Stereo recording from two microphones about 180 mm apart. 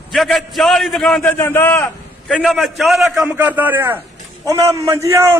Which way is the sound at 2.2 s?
Centre (ahead or behind).